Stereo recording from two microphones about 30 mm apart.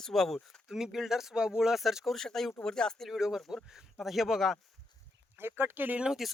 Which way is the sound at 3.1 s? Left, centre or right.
Centre.